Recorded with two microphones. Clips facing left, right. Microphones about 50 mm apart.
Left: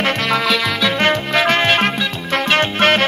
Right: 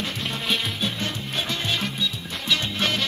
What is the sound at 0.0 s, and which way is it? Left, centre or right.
Music, left.